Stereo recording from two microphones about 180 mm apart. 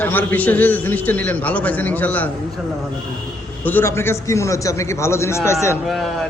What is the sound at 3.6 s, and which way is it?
A man's voice, 10° left (ahead or behind).